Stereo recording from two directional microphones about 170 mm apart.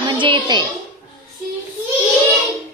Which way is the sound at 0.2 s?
25° right (ahead or behind).